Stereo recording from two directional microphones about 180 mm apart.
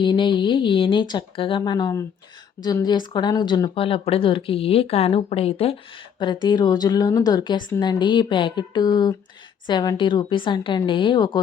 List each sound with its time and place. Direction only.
0.0 s speech: 25° left (ahead or behind)